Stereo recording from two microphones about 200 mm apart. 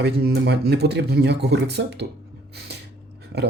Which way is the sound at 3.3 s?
55° right (ahead or behind).